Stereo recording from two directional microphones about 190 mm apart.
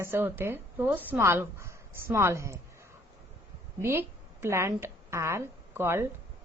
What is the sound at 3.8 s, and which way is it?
A woman's voice, 10° right (ahead or behind).